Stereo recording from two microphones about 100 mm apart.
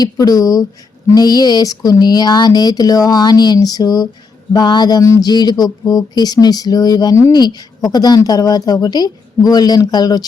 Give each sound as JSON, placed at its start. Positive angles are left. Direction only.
{"t": 0.0, "sound": "speech", "side_deg": 40}
{"t": 5.0, "sound": "speech", "side_deg": 30}
{"t": 5.3, "sound": "speech", "side_deg": 45}